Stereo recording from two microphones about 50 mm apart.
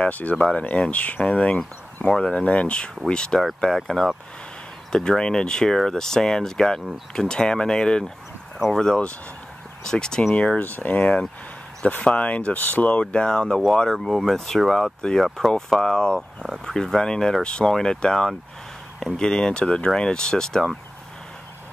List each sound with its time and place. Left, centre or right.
0.1 s speech: left
0.4 s speech: centre
3.3 s speech: centre; by 10.6 s left
10.6 s speech: left
12.5 s speech: left; by 20.7 s centre